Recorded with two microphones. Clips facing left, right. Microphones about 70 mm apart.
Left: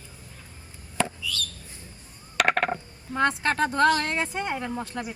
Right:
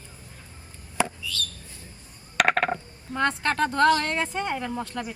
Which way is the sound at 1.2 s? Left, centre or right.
Right.